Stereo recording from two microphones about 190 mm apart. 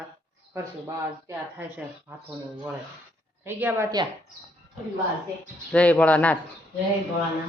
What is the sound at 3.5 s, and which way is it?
Speech, 10° right (ahead or behind).